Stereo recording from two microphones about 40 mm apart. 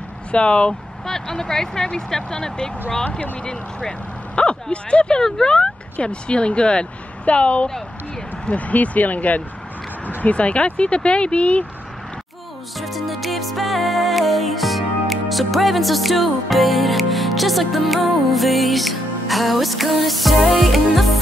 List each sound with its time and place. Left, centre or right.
0.3 s speech: left
1.0 s speech: centre
3.0 s speech: left
4.4 s speech: left
12.7 s music: centre